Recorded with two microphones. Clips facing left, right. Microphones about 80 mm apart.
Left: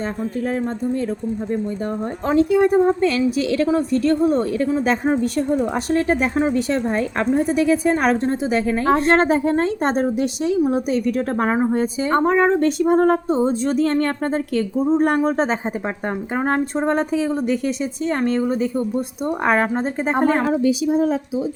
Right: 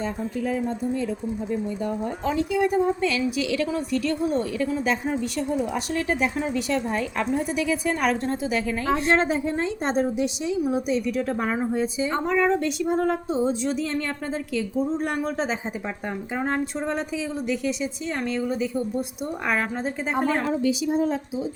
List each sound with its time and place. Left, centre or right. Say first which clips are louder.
2.2 s a woman's voice: left 8 dB; left
20.5 s a woman's voice: left 5 dB; left